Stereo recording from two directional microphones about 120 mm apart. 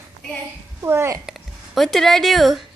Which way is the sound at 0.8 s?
20° right (ahead or behind).